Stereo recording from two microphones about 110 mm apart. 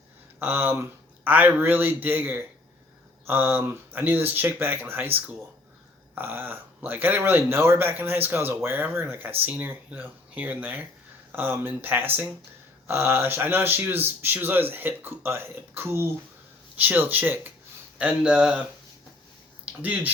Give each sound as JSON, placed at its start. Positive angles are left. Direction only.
{"t": 0.3, "sound": "speech", "side_deg": -20}
{"t": 19.8, "sound": "speech", "side_deg": -15}